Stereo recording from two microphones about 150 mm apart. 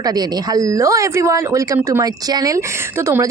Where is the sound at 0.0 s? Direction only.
25° right (ahead or behind).